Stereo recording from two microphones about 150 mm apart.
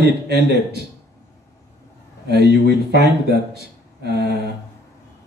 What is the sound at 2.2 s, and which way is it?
A man's voice, 90° right.